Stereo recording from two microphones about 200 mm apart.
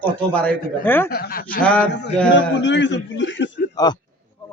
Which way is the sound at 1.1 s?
50° left (ahead or behind).